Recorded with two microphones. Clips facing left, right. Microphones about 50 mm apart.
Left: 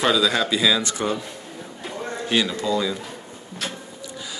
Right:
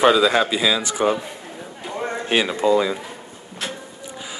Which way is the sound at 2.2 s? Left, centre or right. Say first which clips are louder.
Right 4 dB; right.